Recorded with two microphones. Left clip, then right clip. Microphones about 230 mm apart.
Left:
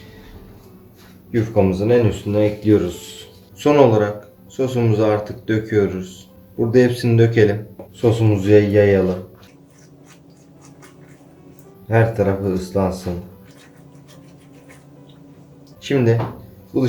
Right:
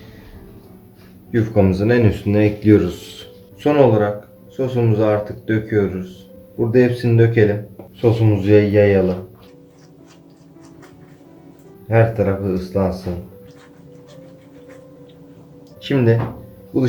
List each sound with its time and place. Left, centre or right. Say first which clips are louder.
1.3 s speech: right 1 dB; centre
3.6 s speech: left 1 dB; centre
11.9 s speech: right 1 dB; centre
15.8 s speech: even; centre